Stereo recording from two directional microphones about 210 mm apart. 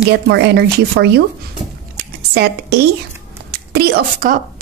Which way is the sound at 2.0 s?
50° right (ahead or behind).